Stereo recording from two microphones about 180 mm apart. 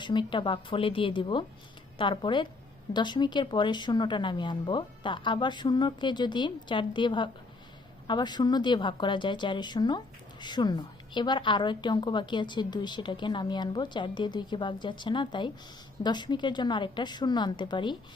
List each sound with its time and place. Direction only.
0.0 s a woman's voice: 25° left (ahead or behind)